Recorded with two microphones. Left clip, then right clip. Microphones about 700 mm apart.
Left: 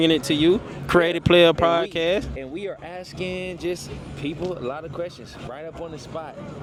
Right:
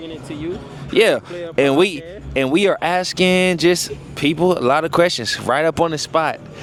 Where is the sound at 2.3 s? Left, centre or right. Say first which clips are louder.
Right 16 dB; right.